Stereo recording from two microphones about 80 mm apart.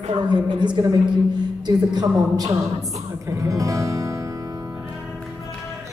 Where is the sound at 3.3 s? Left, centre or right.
Right.